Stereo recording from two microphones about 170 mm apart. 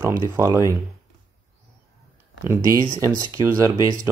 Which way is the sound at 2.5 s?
20° right (ahead or behind).